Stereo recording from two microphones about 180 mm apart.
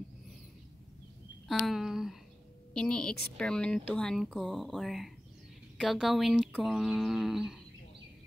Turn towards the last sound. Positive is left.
turn(degrees=0)  # may be behind; listen again after turning